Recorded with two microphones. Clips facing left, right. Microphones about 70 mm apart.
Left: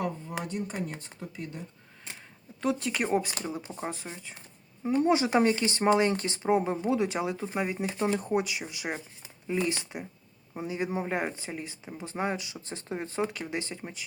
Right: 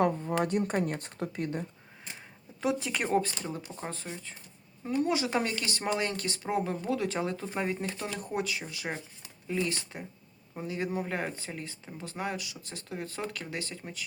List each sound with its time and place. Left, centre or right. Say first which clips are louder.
0.4 s speech: right 4 dB; right
2.6 s a woman's voice: left 1 dB; centre
3.1 s speech: even; centre
4.9 s speech: left 5 dB; left
7.2 s speech: left 2 dB; centre
7.9 s speech: left 6 dB; left